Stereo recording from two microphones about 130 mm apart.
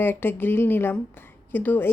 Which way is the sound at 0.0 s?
15° left (ahead or behind).